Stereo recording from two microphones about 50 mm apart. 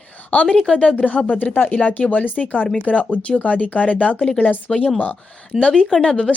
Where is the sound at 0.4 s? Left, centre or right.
Centre.